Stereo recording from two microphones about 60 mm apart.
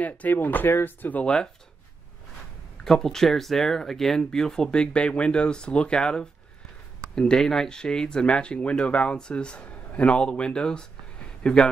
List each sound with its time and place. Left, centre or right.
0.0 s speech: left
1.2 s speech: centre
2.8 s speech: centre